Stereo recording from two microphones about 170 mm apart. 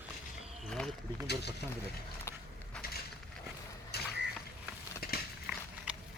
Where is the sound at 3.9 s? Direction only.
70° left (ahead or behind).